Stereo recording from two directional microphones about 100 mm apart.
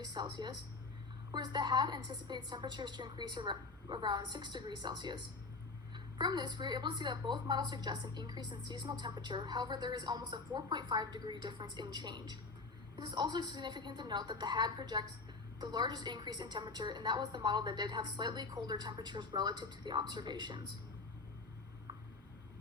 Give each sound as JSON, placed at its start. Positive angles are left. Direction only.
{"t": 0.0, "sound": "a woman's voice", "side_deg": -45}